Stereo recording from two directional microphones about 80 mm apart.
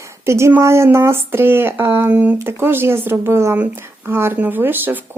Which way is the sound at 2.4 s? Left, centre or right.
Right.